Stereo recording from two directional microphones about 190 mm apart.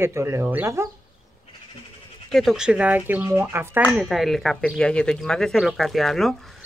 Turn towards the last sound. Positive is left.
turn(degrees=0)  # may be behind; listen again after turning